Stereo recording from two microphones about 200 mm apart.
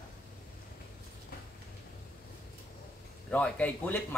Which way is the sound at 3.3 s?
10° left (ahead or behind).